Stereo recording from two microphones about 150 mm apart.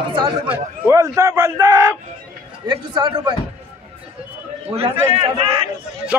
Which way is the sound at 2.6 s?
30° right (ahead or behind).